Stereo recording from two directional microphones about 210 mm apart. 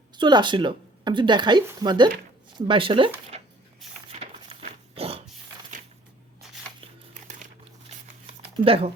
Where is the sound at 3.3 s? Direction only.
30° right (ahead or behind).